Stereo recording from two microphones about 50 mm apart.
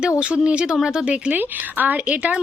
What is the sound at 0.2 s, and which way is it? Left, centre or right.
A woman's voice, right.